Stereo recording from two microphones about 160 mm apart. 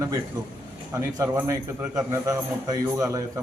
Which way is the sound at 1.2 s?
20° right (ahead or behind).